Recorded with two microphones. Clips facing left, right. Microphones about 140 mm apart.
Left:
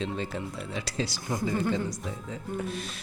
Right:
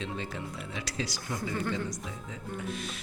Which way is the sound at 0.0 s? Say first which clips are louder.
Left 4 dB; 35° left (ahead or behind).